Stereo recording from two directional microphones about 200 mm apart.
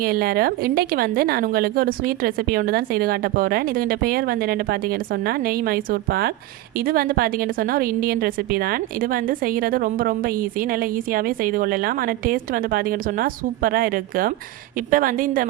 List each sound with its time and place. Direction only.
0.0 s a woman's voice: 50° right (ahead or behind)